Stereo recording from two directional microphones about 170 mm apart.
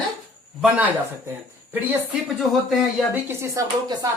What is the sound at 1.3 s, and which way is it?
Speech, 10° right (ahead or behind).